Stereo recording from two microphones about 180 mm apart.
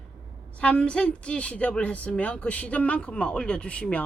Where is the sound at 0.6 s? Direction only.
5° left (ahead or behind).